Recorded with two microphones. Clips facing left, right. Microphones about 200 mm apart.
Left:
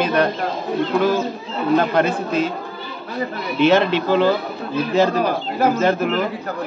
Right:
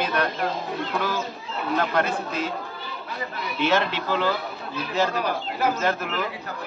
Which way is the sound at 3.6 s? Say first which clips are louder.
Left 8 dB; 20° left (ahead or behind).